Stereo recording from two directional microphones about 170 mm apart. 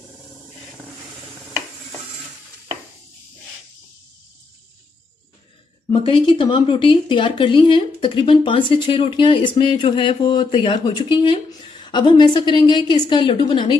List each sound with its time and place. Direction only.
5.9 s speech: 30° left (ahead or behind)